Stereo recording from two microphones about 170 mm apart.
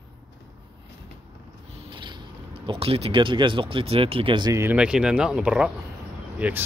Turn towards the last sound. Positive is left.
turn(degrees=-10)  # may be behind; listen again after turning